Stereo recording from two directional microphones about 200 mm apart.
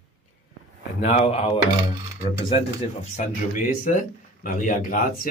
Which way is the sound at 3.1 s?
40° left (ahead or behind).